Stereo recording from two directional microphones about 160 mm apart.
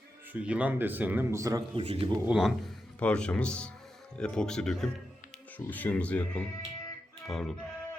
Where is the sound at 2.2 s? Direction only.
5° right (ahead or behind).